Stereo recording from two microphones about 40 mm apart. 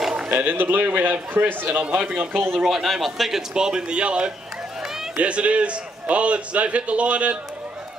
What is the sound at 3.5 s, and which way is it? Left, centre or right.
Speech, centre.